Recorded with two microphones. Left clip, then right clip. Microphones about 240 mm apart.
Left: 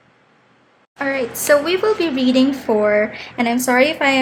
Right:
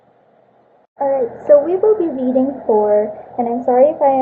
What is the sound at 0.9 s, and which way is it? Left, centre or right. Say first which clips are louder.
A woman's voice: right 4 dB; left.